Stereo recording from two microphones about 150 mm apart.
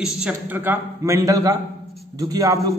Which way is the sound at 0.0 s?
10° right (ahead or behind).